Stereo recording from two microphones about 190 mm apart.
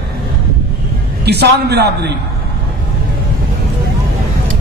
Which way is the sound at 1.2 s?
60° right (ahead or behind).